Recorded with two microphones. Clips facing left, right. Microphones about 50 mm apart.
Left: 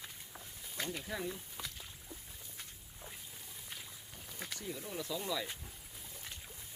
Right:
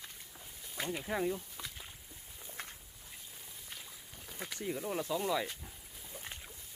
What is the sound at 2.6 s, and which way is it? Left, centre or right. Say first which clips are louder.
Walk: right 7 dB; right.